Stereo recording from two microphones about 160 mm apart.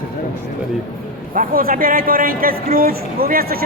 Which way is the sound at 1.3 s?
65° right (ahead or behind).